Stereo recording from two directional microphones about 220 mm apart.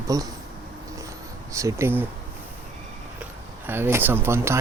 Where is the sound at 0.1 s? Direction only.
15° right (ahead or behind).